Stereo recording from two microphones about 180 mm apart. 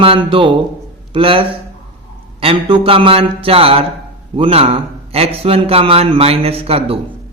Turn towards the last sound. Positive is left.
turn(degrees=-30)  # may be behind; listen again after turning